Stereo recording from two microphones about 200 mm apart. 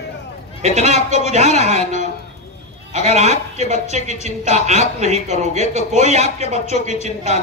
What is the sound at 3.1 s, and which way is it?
Speech, 35° right (ahead or behind).